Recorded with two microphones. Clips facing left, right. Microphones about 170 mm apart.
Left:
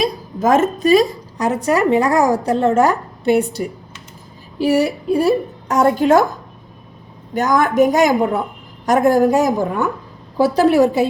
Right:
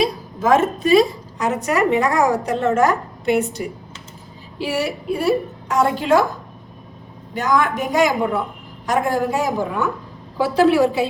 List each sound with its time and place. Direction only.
0.0 s a sound: 40° left (ahead or behind)
1.6 s a woman's voice: 30° left (ahead or behind)
7.3 s a woman's voice: 45° left (ahead or behind)